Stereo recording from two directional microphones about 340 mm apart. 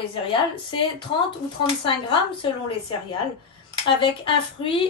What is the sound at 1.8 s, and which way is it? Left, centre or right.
Speech, centre.